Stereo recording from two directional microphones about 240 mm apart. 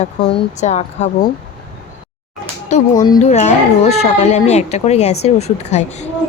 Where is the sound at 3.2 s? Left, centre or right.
Left.